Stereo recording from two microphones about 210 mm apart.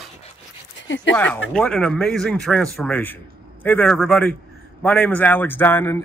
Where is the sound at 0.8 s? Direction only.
60° left (ahead or behind).